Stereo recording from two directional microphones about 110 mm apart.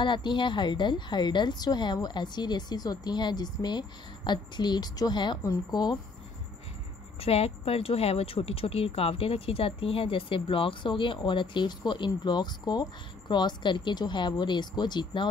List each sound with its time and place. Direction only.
0.0 s a woman's voice: 45° left (ahead or behind)
7.2 s speech: 65° left (ahead or behind); by 15.2 s 40° left (ahead or behind)